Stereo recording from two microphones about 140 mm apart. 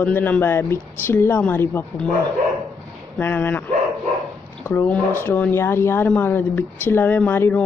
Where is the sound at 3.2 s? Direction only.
15° left (ahead or behind).